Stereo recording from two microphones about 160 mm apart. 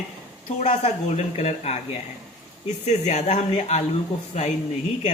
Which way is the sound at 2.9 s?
45° left (ahead or behind).